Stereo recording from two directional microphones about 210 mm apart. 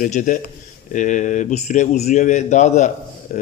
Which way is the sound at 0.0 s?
40° left (ahead or behind).